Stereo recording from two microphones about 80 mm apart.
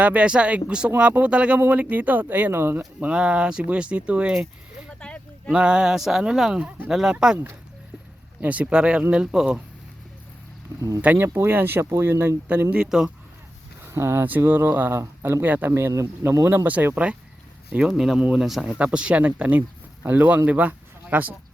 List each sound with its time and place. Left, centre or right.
0.0 s speech: centre
3.1 s speech: centre
4.9 s a sound: centre
5.5 s speech: centre
8.4 s speech: centre
10.8 s speech: right
11.0 s speech: right
12.7 s speech: centre
13.8 s speech: right
16.3 s speech: right; by 18.4 s centre
18.4 s speech: centre
18.8 s speech: centre